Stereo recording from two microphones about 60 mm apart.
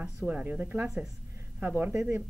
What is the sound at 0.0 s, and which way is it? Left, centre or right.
Speech, centre.